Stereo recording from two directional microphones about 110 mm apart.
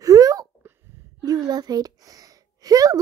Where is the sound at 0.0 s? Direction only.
35° right (ahead or behind).